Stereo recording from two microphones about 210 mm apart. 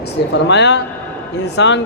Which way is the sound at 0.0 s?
55° left (ahead or behind).